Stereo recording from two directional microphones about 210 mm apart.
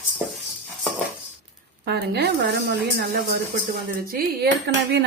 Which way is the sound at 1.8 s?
50° right (ahead or behind).